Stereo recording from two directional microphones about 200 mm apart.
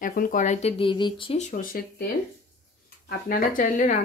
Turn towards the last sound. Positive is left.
turn(degrees=40)  # may be behind; listen again after turning